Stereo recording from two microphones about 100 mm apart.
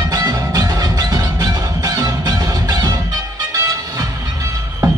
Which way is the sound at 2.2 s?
40° right (ahead or behind).